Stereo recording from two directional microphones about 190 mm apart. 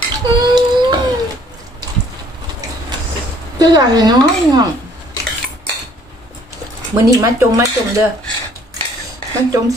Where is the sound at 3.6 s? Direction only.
20° right (ahead or behind).